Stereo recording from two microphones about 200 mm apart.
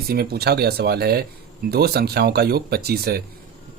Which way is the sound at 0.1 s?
50° right (ahead or behind).